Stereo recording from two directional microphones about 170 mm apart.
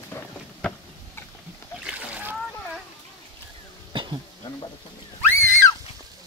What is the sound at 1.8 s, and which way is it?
Splash, 5° right (ahead or behind).